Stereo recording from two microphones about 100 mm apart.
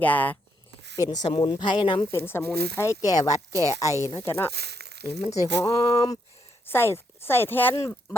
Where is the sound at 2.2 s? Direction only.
25° left (ahead or behind).